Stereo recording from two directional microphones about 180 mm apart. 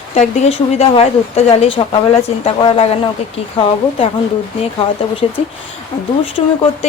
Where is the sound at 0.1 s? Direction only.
40° left (ahead or behind).